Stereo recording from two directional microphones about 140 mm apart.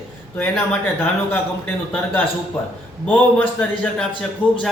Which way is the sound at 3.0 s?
10° left (ahead or behind).